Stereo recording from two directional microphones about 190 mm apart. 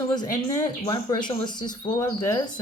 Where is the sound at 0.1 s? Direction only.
20° left (ahead or behind).